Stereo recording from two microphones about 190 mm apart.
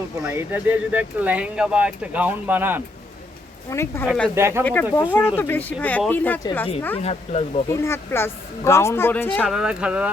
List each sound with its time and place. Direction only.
0.2 s speech: 10° right (ahead or behind)
3.7 s speech: 15° left (ahead or behind)
4.0 s speech: centre (ahead or behind)
4.4 s speech: 15° right (ahead or behind)
4.6 s speech: 10° left (ahead or behind)
7.0 s speech: 35° left (ahead or behind)
7.7 s speech: 15° left (ahead or behind)
9.4 s speech: 5° right (ahead or behind)